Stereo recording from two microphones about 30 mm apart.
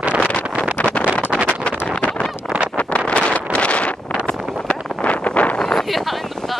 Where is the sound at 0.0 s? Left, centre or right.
Right.